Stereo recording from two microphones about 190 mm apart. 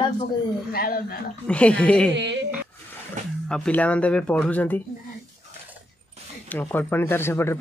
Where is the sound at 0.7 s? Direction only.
50° left (ahead or behind).